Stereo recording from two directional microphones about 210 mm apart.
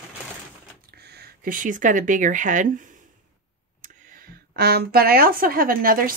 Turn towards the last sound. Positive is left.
turn(degrees=-40)  # may be behind; listen again after turning